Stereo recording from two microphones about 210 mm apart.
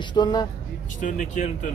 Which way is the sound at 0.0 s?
20° left (ahead or behind).